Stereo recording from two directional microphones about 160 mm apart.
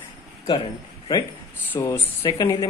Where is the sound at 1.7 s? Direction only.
15° left (ahead or behind).